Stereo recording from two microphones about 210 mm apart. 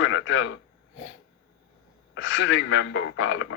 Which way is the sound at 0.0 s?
65° left (ahead or behind).